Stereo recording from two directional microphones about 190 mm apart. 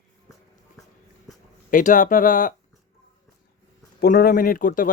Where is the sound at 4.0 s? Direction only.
55° left (ahead or behind).